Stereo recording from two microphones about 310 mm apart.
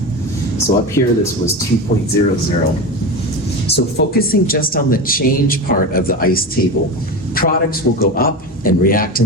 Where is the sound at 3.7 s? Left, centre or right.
Left.